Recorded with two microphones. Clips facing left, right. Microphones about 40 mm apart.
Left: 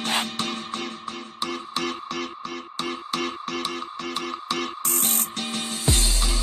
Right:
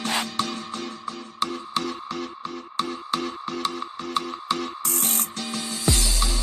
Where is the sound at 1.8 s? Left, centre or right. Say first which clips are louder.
Left 1 dB; left.